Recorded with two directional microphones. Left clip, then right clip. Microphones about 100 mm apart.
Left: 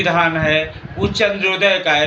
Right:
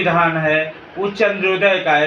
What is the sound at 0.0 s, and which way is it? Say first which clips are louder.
A man's voice: even; 35° left (ahead or behind).